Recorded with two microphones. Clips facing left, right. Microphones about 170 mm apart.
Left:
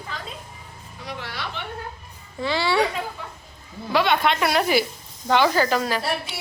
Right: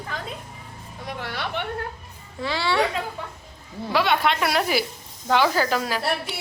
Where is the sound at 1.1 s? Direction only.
55° right (ahead or behind).